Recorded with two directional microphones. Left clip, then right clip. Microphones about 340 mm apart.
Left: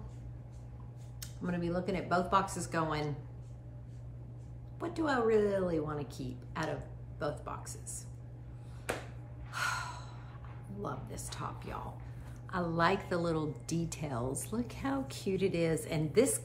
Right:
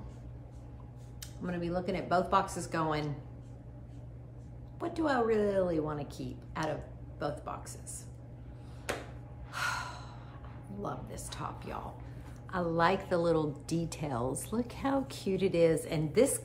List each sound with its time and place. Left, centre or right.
1.2 s a woman's voice: centre
4.7 s a woman's voice: centre
9.5 s gasp: centre
10.8 s a woman's voice: centre